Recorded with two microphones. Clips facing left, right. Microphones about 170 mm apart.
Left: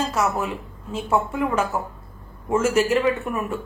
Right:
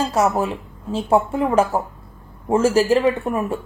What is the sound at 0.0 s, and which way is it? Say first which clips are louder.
A woman's voice: right 4 dB; 30° right (ahead or behind).